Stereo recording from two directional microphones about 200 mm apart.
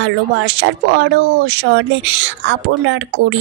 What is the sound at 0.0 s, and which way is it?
Speech, 70° right (ahead or behind).